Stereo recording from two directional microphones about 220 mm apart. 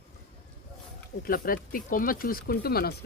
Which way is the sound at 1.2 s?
40° left (ahead or behind).